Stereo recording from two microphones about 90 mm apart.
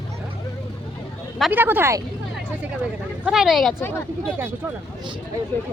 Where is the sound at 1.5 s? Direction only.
20° right (ahead or behind).